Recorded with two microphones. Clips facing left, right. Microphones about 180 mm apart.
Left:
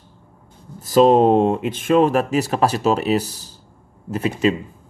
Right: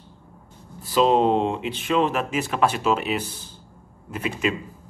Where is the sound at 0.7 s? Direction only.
45° left (ahead or behind).